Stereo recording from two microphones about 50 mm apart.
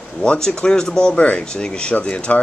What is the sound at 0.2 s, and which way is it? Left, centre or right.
Speech, left.